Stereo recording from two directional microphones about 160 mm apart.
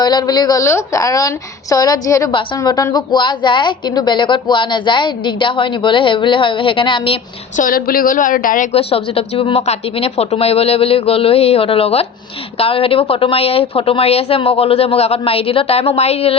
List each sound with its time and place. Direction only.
0.0 s a woman's voice: 25° left (ahead or behind)
7.5 s a woman's voice: 60° left (ahead or behind)
8.7 s a woman's voice: 35° left (ahead or behind)